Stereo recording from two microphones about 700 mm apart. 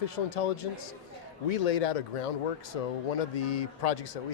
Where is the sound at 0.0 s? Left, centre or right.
Left.